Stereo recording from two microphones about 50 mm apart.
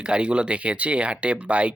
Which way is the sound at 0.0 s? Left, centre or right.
Centre.